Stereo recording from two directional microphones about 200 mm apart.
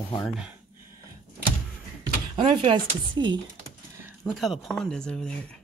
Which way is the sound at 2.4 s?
25° right (ahead or behind).